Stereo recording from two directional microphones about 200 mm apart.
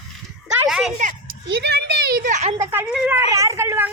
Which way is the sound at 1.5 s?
55° right (ahead or behind).